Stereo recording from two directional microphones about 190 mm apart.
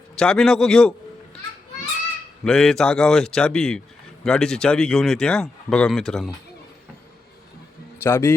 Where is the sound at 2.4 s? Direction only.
5° left (ahead or behind).